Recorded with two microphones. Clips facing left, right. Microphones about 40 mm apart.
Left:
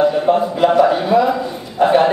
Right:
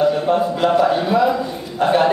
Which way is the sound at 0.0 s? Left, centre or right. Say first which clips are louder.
Left 2 dB; centre.